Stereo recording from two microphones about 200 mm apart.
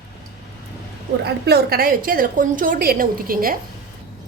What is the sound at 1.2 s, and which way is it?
A woman's voice, 55° right (ahead or behind).